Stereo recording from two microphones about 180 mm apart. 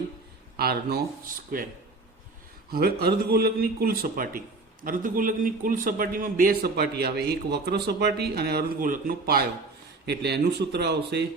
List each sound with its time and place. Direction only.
0.5 s a man's voice: 60° right (ahead or behind)
2.7 s a man's voice: 60° right (ahead or behind)